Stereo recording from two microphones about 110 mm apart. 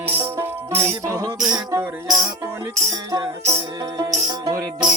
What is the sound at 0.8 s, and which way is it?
Music, 30° right (ahead or behind).